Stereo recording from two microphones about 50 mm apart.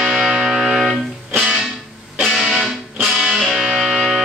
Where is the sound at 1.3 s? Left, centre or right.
Centre.